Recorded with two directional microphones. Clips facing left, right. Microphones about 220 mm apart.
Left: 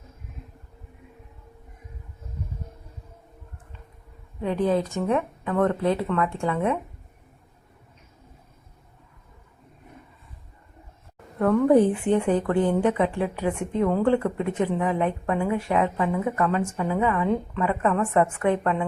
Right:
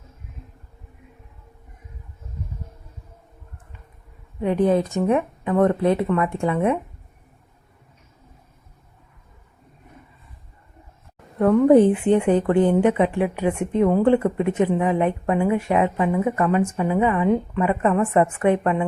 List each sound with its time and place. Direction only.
4.4 s speech: 15° right (ahead or behind)
11.3 s speech: 20° right (ahead or behind)